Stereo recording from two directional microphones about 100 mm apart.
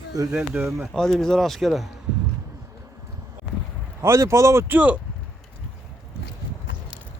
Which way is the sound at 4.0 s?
25° right (ahead or behind).